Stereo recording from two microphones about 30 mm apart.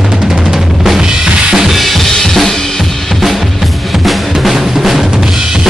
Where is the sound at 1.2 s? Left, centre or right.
Right.